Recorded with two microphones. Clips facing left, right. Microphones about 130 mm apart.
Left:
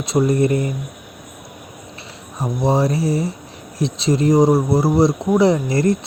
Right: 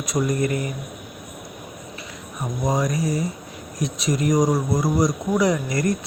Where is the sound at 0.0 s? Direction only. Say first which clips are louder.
Left 6 dB; 30° left (ahead or behind).